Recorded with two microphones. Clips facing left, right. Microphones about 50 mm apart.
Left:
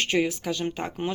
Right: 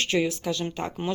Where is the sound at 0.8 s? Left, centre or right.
Centre.